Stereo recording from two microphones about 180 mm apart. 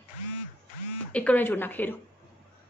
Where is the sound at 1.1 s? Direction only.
10° left (ahead or behind).